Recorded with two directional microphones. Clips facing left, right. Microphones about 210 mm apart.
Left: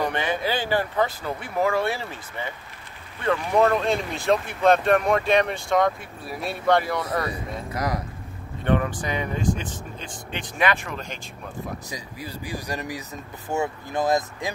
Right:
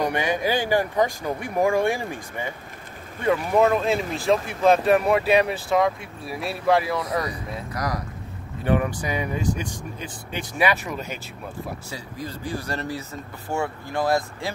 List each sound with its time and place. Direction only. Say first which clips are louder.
0.0 s speech: right 2 dB; 10° right (ahead or behind)
7.7 s speech: left 1 dB; 25° left (ahead or behind)
8.6 s speech: right 1 dB; 10° right (ahead or behind)
11.9 s speech: right 2 dB; 10° left (ahead or behind)